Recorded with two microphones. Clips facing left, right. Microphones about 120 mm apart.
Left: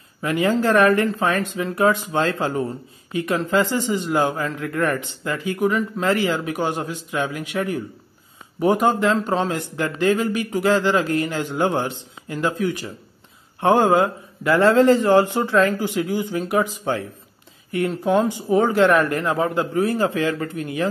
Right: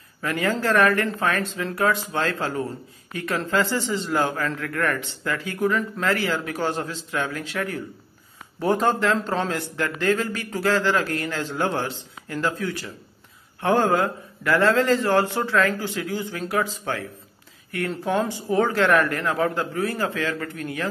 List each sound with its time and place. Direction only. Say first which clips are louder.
0.2 s a man's voice: left 5 dB; 20° left (ahead or behind)